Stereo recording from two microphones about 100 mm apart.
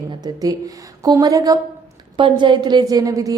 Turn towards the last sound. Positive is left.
turn(degrees=-35)  # may be behind; listen again after turning